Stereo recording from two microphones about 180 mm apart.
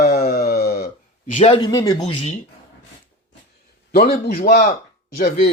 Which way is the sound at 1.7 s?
20° left (ahead or behind).